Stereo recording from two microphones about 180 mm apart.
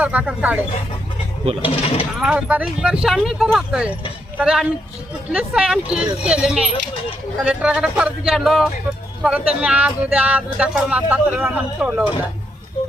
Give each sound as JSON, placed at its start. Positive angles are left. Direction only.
{"t": 0.0, "sound": "speech", "side_deg": -10}
{"t": 1.6, "sound": "speech", "side_deg": 35}
{"t": 2.1, "sound": "speech", "side_deg": -5}